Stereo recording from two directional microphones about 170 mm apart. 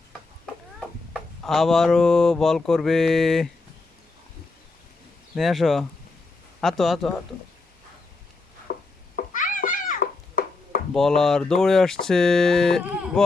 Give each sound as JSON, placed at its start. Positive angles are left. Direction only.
{"t": 1.1, "sound": "speech", "side_deg": 0}
{"t": 5.3, "sound": "speech", "side_deg": 0}
{"t": 8.7, "sound": "a sound", "side_deg": 60}
{"t": 9.1, "sound": "cat", "side_deg": 50}
{"t": 10.9, "sound": "speech", "side_deg": 0}